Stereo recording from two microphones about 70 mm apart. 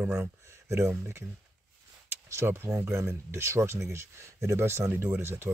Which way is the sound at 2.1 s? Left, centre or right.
Right.